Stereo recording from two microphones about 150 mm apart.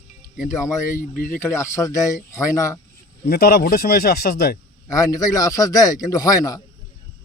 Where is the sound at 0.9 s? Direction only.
65° left (ahead or behind).